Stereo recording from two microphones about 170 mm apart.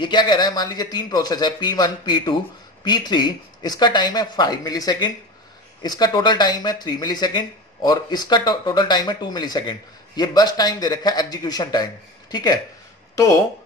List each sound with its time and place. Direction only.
0.0 s speech: 25° left (ahead or behind)